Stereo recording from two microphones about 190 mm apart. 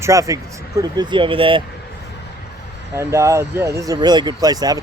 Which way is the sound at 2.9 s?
15° right (ahead or behind).